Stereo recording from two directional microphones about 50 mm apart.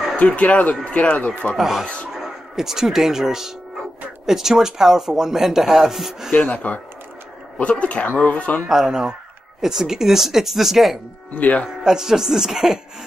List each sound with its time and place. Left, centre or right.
0.4 s speech: left
1.6 s speech: centre
6.3 s speech: left
7.8 s speech: left
8.6 s speech: centre
11.3 s speech: left
11.8 s speech: centre